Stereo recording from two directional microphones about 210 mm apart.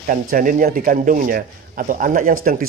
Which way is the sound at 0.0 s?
40° right (ahead or behind).